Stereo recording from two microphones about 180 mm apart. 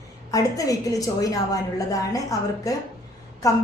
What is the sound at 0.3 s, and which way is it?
A woman's voice, 20° left (ahead or behind).